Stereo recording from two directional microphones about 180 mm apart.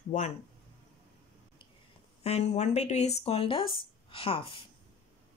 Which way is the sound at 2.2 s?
35° left (ahead or behind).